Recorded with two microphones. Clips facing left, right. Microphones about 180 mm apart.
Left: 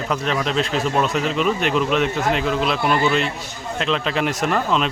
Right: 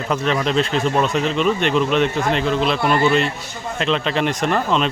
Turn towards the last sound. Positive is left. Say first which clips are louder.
# right 1 dB
turn(degrees=0)  # may be behind; listen again after turning